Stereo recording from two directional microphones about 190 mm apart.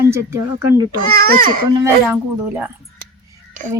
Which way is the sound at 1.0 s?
50° right (ahead or behind).